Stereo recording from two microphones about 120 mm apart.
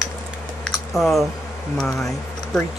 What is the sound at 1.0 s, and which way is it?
Speech, centre (ahead or behind).